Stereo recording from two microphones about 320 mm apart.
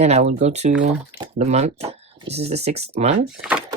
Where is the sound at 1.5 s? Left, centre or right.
Centre.